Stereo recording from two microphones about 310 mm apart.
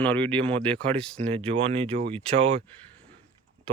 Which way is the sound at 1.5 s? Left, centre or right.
Centre.